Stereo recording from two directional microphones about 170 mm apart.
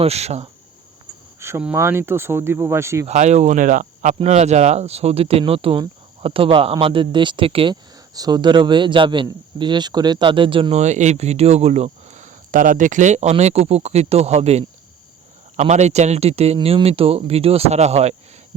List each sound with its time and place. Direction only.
0.0 s speech: 40° right (ahead or behind)
1.4 s speech: 15° right (ahead or behind)
3.1 s speech: 40° right (ahead or behind)